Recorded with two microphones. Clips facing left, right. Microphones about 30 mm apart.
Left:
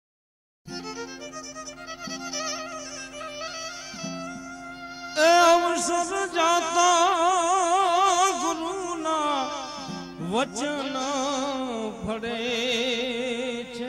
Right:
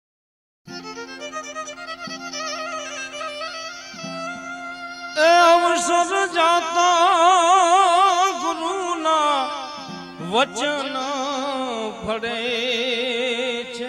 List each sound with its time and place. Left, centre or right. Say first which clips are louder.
2.3 s music: right 3 dB; centre
5.1 s music: right 4 dB; centre
5.7 s music: right 7 dB; right
6.4 s music: right 2 dB; centre
7.2 s a sound: right 7 dB; right
8.0 s music: right 4 dB; centre
8.6 s a sound: right 7 dB; right
10.2 s speech: right 6 dB; right
11.0 s music: right 2 dB; centre
11.6 s a sound: right 4 dB; right
12.1 s mantra: right 6 dB; right
12.4 s music: right 2 dB; right
13.1 s music: right 6 dB; right